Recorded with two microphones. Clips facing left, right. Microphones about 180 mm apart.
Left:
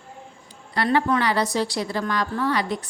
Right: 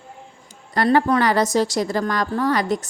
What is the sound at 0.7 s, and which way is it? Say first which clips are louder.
A woman's voice: right 4 dB; 40° right (ahead or behind).